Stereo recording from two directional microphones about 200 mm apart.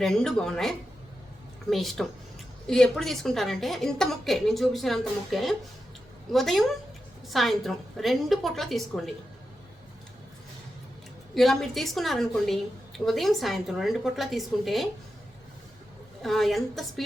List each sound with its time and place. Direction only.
0.0 s a woman's voice: centre (ahead or behind)
11.3 s a woman's voice: centre (ahead or behind)
16.2 s a woman's voice: centre (ahead or behind)